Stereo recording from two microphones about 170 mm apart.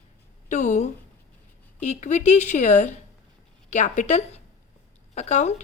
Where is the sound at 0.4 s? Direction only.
45° left (ahead or behind).